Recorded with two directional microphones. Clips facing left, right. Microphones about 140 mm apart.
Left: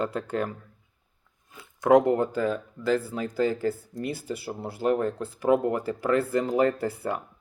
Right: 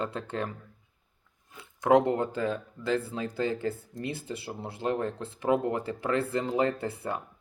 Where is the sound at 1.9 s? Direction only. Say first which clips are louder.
Left 3 dB; 30° right (ahead or behind).